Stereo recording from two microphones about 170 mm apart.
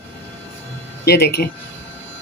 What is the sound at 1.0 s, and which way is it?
Speech, 70° left (ahead or behind).